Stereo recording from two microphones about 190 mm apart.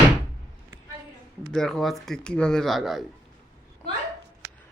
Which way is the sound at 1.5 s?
Centre (ahead or behind).